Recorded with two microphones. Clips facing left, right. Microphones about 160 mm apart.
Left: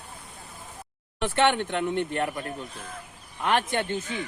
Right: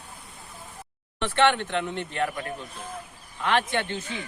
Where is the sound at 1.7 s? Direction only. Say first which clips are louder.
Left 3 dB; 50° left (ahead or behind).